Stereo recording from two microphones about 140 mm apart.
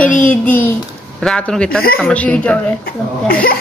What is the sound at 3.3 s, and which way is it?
Speech, 90° left.